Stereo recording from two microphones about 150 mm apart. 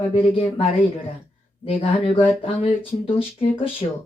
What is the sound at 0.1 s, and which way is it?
Speech, 35° left (ahead or behind).